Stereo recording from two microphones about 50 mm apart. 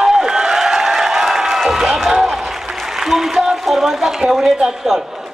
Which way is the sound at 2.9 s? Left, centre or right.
Centre.